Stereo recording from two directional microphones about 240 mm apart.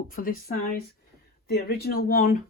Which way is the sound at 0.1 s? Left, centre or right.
Left.